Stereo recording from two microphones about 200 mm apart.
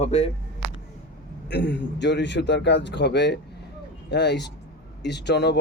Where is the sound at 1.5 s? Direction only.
60° left (ahead or behind).